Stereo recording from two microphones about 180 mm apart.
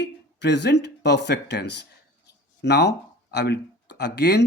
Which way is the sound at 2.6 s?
65° left (ahead or behind).